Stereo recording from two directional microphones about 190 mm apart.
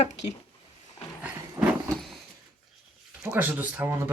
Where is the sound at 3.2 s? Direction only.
10° right (ahead or behind).